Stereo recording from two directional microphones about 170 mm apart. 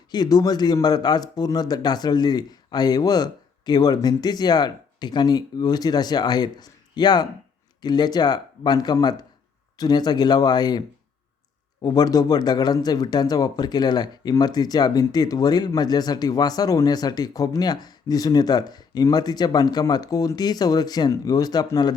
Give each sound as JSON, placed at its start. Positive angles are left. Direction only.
{"t": 0.1, "sound": "speech", "side_deg": 25}